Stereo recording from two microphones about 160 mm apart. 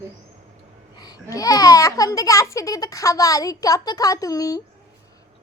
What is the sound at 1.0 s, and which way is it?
A child's voice, 25° left (ahead or behind).